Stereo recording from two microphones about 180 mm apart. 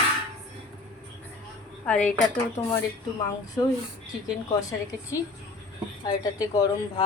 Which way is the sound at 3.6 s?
20° left (ahead or behind).